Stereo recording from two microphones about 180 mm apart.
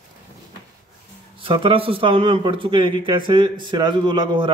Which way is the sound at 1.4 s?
30° right (ahead or behind).